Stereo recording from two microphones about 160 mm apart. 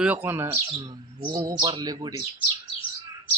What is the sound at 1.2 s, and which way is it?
Speech, 30° right (ahead or behind).